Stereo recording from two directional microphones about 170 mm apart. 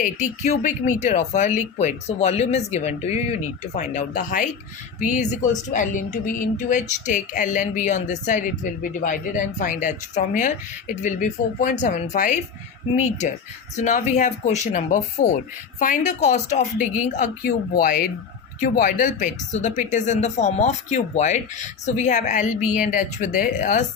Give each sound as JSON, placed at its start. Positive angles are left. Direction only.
{"t": 0.0, "sound": "speech", "side_deg": 45}
{"t": 17.4, "sound": "speech", "side_deg": 60}